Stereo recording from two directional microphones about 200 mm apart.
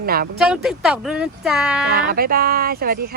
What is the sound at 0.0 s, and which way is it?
Speech, 50° right (ahead or behind).